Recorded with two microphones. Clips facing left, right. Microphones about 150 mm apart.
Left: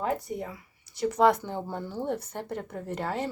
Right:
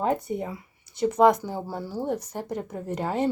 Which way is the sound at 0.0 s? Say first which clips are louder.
Right 4 dB; 25° right (ahead or behind).